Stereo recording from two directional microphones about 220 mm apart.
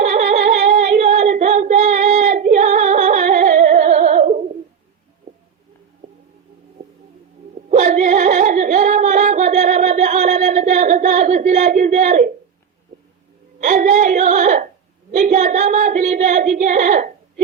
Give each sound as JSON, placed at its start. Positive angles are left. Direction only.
{"t": 0.6, "sound": "female singing", "side_deg": -30}
{"t": 7.7, "sound": "singing", "side_deg": -30}
{"t": 13.6, "sound": "a sound", "side_deg": -35}
{"t": 15.1, "sound": "child singing", "side_deg": -35}